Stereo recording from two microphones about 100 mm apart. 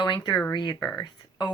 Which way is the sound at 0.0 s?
45° left (ahead or behind).